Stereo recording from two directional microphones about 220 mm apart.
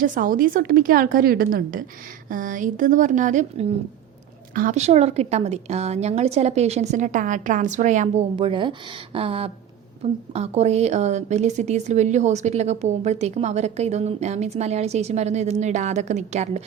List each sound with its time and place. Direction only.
0.0 s a woman's voice: 40° right (ahead or behind)